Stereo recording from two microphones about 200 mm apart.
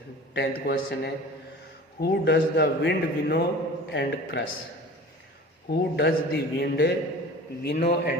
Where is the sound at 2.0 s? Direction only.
55° left (ahead or behind).